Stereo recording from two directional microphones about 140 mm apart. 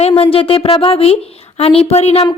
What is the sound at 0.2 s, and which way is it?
A woman's voice, 40° left (ahead or behind).